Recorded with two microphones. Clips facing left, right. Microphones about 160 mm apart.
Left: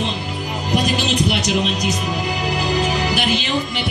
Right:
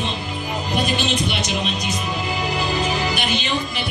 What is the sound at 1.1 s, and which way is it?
Speech, 85° left.